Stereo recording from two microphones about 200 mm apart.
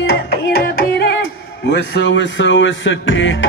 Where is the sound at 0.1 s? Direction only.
55° left (ahead or behind).